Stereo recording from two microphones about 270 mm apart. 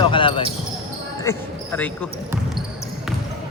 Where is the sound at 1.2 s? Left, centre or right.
Centre.